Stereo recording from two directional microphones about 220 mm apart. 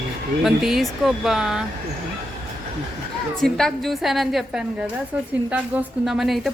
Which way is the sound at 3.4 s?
Centre (ahead or behind).